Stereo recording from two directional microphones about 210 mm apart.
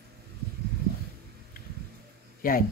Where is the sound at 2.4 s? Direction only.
45° left (ahead or behind).